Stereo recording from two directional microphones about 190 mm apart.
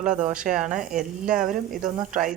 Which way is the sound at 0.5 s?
5° right (ahead or behind).